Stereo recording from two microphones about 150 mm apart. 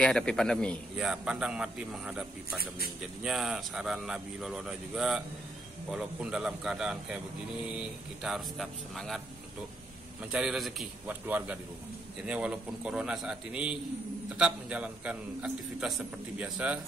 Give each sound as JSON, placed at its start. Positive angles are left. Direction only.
{"t": 0.0, "sound": "a man's voice", "side_deg": 5}
{"t": 0.9, "sound": "speech", "side_deg": -5}
{"t": 10.3, "sound": "a man's voice", "side_deg": -5}